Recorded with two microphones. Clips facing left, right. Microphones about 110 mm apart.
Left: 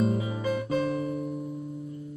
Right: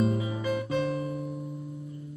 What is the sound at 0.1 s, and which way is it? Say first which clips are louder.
Guitar: left 1 dB; 40° left (ahead or behind).